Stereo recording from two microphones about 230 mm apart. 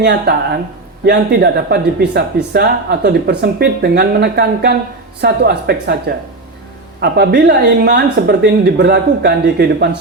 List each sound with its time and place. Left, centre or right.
0.0 s speech: right
7.0 s speech: right